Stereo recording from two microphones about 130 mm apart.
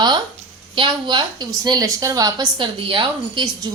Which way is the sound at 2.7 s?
40° right (ahead or behind).